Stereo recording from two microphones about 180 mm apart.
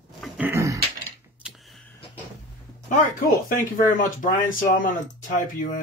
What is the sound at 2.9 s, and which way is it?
Speech, 45° left (ahead or behind).